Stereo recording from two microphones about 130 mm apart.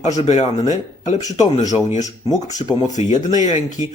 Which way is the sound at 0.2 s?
55° left (ahead or behind).